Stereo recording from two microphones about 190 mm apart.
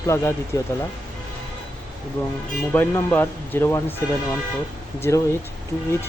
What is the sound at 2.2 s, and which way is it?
Speech, 10° left (ahead or behind).